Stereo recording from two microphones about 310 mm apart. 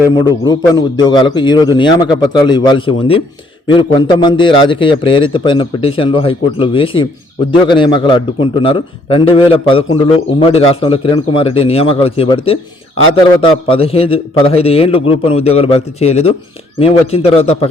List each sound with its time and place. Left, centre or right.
0.3 s a man's voice: centre